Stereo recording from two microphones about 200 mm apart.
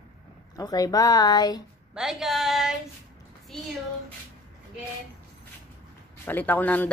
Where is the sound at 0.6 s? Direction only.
20° left (ahead or behind).